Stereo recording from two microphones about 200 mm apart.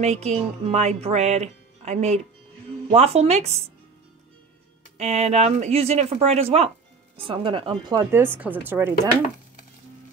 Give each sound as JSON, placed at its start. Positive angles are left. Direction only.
{"t": 0.0, "sound": "speech", "side_deg": -35}
{"t": 4.9, "sound": "speech", "side_deg": -35}